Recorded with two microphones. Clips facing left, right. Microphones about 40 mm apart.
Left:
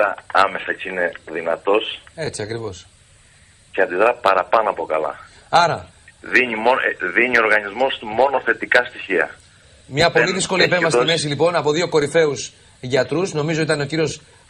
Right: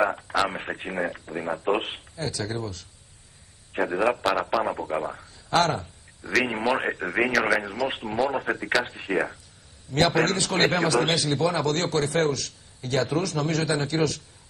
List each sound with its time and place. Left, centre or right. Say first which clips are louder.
0.1 s a man's voice: left 9 dB; left